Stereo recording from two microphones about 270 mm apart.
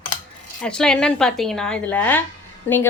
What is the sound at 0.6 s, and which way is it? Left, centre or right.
A woman's voice, centre.